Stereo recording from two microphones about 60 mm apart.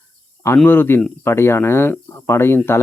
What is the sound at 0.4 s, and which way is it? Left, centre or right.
Speech, left.